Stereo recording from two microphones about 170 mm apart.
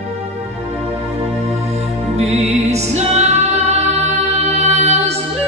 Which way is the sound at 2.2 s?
40° right (ahead or behind).